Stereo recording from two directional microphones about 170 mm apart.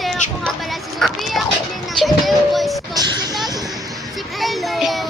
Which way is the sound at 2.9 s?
20° right (ahead or behind).